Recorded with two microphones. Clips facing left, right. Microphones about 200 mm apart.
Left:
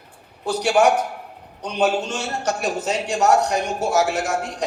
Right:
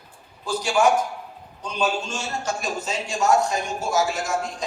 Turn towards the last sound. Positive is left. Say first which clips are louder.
# left 3 dB
turn(degrees=65)  # may be behind; listen again after turning